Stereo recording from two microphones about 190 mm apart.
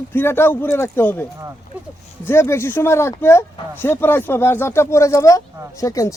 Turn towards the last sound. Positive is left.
turn(degrees=15)  # may be behind; listen again after turning